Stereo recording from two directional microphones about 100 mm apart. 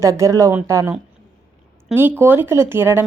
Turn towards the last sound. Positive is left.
turn(degrees=-25)  # may be behind; listen again after turning